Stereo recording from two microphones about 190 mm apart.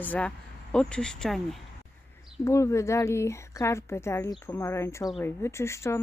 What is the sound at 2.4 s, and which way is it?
A woman's voice, 15° left (ahead or behind).